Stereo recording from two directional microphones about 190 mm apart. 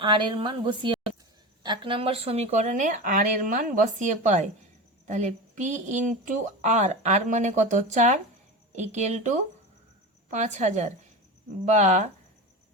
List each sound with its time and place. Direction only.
0.0 s a woman's voice: 25° right (ahead or behind)